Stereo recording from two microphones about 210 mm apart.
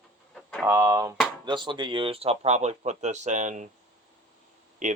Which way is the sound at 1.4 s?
20° right (ahead or behind).